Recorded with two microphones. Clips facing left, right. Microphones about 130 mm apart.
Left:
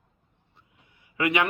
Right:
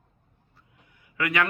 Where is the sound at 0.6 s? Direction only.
25° left (ahead or behind).